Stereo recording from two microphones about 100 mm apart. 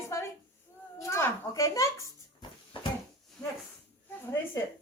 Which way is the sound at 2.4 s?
50° left (ahead or behind).